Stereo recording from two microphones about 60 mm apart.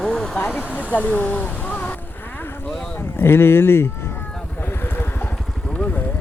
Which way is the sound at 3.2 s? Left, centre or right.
Left.